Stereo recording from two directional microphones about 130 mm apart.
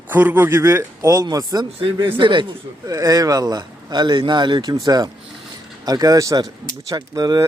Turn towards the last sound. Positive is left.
turn(degrees=-30)  # may be behind; listen again after turning